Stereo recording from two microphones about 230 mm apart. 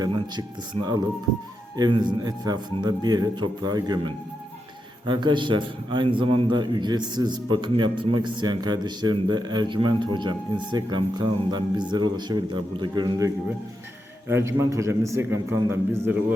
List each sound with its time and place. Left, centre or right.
0.0 s a man's voice: centre